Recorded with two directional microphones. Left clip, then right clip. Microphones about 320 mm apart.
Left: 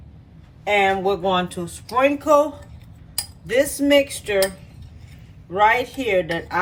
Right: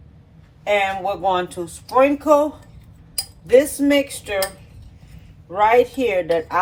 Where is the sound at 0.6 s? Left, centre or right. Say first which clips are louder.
Left 1 dB; right.